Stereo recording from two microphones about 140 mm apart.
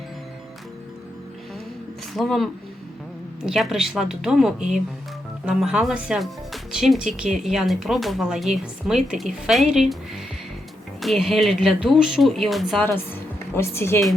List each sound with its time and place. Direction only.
2.1 s speech: centre (ahead or behind)
11.0 s speech: centre (ahead or behind)
12.8 s speech: 15° left (ahead or behind)